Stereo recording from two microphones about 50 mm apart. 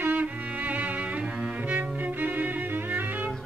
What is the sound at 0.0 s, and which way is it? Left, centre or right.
Music, right.